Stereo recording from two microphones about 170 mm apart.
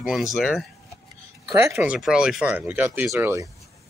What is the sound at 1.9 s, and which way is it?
Speech, 5° right (ahead or behind).